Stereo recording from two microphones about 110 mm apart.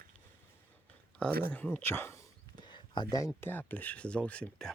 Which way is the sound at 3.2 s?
30° left (ahead or behind).